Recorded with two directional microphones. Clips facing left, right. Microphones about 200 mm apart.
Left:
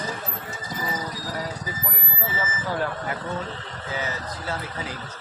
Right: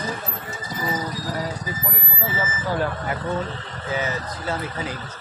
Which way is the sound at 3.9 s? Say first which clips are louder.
Right 4 dB; 20° right (ahead or behind).